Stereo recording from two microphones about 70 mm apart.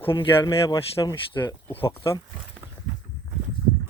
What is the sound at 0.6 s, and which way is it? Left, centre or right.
Speech, left.